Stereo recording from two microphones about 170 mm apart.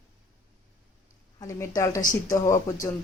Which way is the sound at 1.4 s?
20° left (ahead or behind).